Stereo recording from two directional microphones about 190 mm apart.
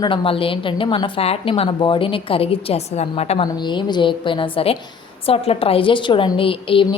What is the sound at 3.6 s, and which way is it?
A woman's voice, 25° left (ahead or behind).